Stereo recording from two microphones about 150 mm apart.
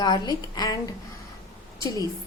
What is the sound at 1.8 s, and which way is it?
Speech, 25° left (ahead or behind).